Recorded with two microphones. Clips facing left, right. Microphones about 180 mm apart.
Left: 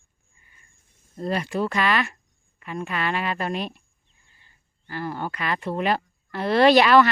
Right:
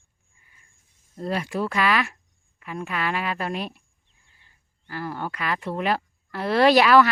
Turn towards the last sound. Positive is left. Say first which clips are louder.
# left 1 dB
turn(degrees=-5)  # may be behind; listen again after turning